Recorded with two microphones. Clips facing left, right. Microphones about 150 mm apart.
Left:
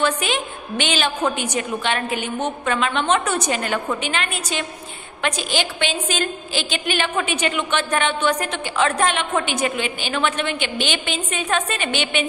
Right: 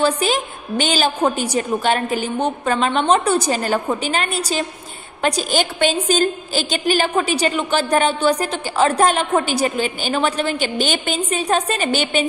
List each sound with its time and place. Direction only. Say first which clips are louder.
0.0 s a woman's voice: right 3 dB; 35° right (ahead or behind)